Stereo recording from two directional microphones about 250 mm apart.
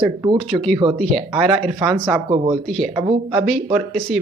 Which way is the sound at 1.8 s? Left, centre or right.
Centre.